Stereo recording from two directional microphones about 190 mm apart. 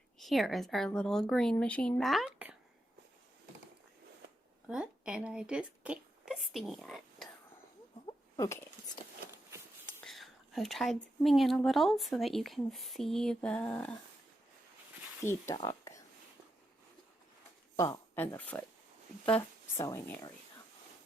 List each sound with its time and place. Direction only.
0.2 s speech: centre (ahead or behind)
4.7 s a woman's voice: 5° right (ahead or behind)
8.0 s a sound: 15° left (ahead or behind)
9.8 s speech: 5° left (ahead or behind)
15.2 s speech: 15° left (ahead or behind)
17.7 s speech: 15° left (ahead or behind)